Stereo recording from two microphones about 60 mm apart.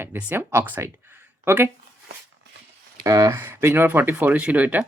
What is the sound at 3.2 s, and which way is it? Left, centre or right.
Speech, right.